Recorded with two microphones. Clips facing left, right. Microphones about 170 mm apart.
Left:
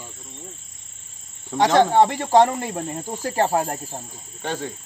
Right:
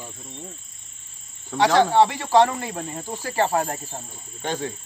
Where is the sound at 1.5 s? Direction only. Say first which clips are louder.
Left 1 dB; 20° left (ahead or behind).